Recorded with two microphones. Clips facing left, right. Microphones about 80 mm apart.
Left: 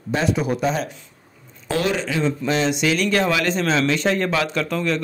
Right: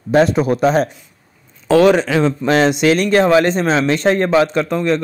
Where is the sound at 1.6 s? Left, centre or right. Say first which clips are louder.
Right 11 dB; right.